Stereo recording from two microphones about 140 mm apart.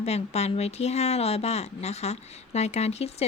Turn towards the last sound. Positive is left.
turn(degrees=50)  # may be behind; listen again after turning